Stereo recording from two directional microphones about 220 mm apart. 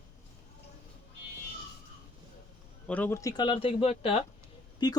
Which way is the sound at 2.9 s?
5° left (ahead or behind).